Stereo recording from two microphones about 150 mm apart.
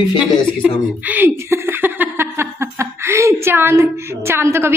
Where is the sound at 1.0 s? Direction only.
10° right (ahead or behind).